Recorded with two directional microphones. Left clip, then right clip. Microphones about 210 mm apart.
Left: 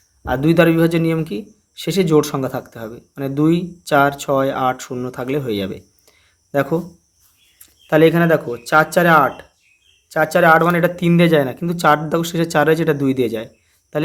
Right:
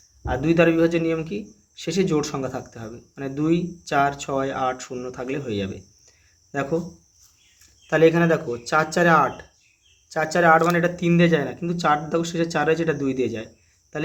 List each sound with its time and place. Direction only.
0.3 s a man's voice: 35° left (ahead or behind)